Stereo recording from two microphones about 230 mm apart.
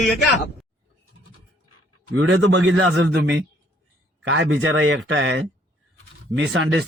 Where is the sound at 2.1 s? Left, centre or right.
Right.